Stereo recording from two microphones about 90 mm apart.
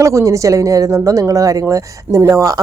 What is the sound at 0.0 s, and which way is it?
Speech, 35° right (ahead or behind).